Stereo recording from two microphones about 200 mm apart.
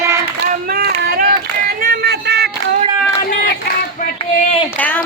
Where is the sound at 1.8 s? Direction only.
50° right (ahead or behind).